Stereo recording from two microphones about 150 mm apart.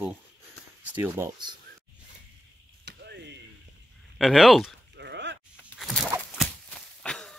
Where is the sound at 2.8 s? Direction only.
90° right.